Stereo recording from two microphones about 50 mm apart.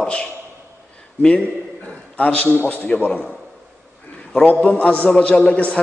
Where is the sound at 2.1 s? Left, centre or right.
Left.